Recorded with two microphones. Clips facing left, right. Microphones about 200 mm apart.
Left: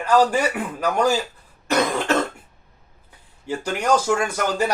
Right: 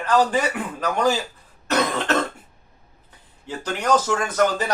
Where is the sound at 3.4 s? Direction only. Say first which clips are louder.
Left 1 dB; 10° left (ahead or behind).